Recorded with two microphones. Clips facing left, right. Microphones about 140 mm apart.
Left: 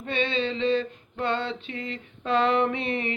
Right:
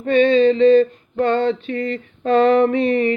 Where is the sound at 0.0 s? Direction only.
50° right (ahead or behind).